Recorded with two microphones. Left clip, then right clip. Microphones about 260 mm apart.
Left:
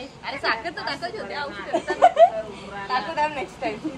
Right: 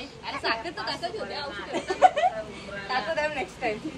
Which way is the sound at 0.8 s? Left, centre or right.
Centre.